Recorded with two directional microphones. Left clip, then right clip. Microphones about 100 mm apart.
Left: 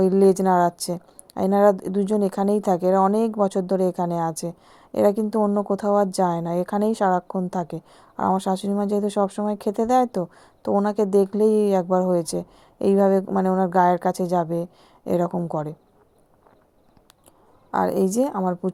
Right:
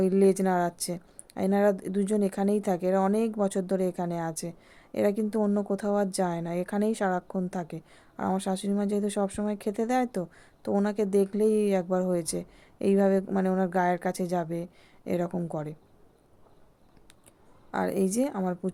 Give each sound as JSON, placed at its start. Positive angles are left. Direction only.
{"t": 0.0, "sound": "a woman's voice", "side_deg": 35}
{"t": 13.7, "sound": "speech", "side_deg": 35}
{"t": 15.3, "sound": "speech", "side_deg": 25}
{"t": 17.7, "sound": "a woman's voice", "side_deg": 30}